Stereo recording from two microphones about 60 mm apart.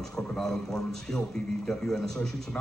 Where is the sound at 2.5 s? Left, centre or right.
Left.